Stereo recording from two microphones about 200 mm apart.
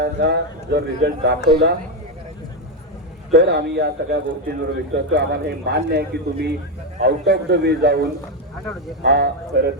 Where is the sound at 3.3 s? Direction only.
55° right (ahead or behind).